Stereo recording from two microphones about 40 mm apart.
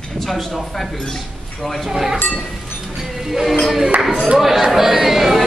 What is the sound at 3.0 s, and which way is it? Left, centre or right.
Music, centre.